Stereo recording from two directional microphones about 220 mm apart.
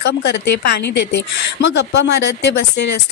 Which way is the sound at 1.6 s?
55° left (ahead or behind).